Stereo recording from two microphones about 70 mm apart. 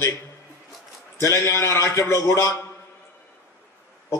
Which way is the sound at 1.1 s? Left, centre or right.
Left.